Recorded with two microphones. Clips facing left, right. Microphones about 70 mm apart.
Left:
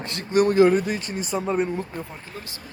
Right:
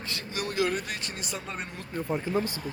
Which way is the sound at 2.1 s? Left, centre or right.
Right.